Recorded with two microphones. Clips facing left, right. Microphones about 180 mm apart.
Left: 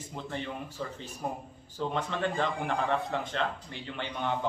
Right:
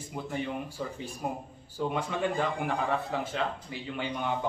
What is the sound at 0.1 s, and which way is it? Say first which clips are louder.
Speech: right 3 dB; 10° right (ahead or behind).